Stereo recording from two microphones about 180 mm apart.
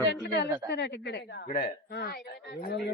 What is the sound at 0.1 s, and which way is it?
Speech, 65° left (ahead or behind).